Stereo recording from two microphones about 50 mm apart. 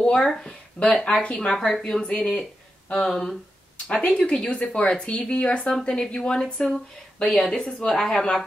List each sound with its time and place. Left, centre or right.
0.0 s speech: centre
0.9 s speech: centre
3.1 s speech: centre
3.8 s speech: centre